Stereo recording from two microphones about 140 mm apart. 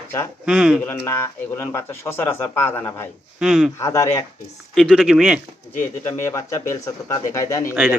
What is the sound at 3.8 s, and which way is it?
Speech, 20° left (ahead or behind).